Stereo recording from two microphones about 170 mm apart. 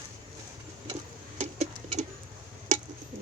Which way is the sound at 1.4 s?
45° right (ahead or behind).